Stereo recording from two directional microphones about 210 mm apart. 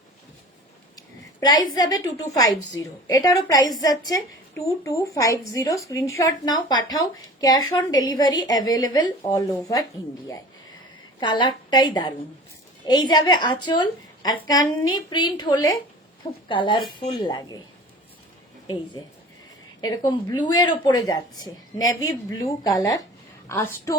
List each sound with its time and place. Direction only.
0.9 s a woman's voice: 20° left (ahead or behind)
11.2 s a woman's voice: 20° left (ahead or behind)
20.1 s a woman's voice: 20° left (ahead or behind)